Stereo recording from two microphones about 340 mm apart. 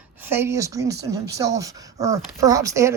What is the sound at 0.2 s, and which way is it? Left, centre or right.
Speech, centre.